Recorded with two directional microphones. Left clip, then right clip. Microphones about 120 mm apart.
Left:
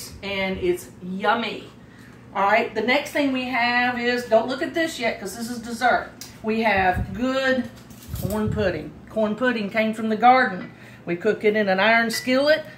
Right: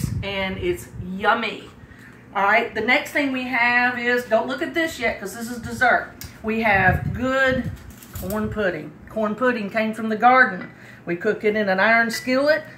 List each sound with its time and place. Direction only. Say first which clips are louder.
0.2 s speech: left 1 dB; 20° left (ahead or behind)
2.3 s a woman's voice: right 1 dB; 5° left (ahead or behind)